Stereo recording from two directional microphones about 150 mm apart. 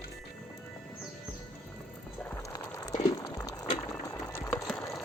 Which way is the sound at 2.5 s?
25° left (ahead or behind).